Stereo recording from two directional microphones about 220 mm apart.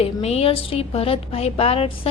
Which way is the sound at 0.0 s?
30° left (ahead or behind).